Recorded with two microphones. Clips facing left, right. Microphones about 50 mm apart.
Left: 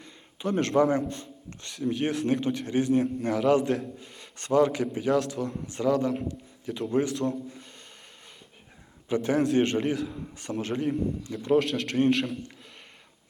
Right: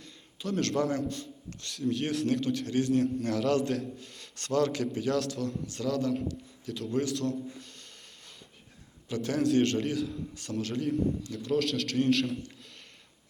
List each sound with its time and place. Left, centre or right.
0.0 s a sound: left
0.8 s a man's voice: left
1.7 s a man's voice: centre
9.0 s a man's voice: left